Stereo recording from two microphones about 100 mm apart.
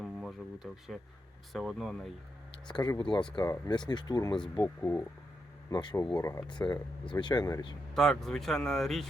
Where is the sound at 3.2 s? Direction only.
50° left (ahead or behind).